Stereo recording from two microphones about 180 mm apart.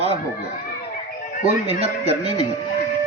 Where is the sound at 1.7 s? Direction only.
35° right (ahead or behind).